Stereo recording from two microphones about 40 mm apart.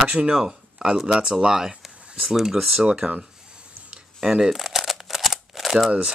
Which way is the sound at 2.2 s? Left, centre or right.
Centre.